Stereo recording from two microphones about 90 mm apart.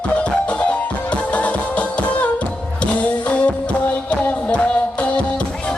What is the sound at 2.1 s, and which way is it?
Music, 15° left (ahead or behind).